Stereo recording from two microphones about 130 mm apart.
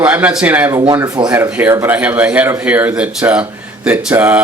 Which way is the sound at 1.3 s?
15° right (ahead or behind).